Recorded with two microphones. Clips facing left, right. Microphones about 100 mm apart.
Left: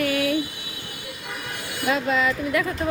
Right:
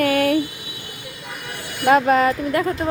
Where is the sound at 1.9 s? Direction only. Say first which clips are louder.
Right 8 dB; 50° right (ahead or behind).